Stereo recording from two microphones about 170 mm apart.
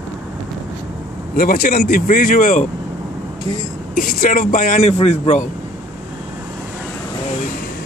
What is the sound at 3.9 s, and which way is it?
Speech, 55° left (ahead or behind).